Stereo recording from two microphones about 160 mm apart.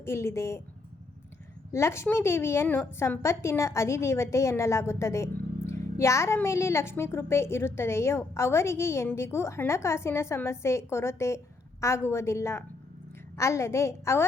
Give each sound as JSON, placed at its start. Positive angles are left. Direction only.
{"t": 0.0, "sound": "a woman's voice", "side_deg": 15}
{"t": 1.7, "sound": "a woman's voice", "side_deg": 15}